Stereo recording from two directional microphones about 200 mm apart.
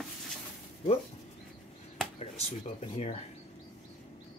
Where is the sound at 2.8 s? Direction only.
35° left (ahead or behind).